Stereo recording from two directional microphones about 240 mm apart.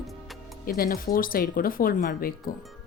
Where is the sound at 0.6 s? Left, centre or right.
Left.